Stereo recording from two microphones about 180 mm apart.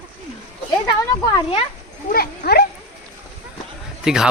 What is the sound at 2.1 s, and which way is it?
Speech, 60° left (ahead or behind).